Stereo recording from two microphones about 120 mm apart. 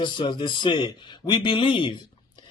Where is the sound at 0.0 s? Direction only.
40° left (ahead or behind).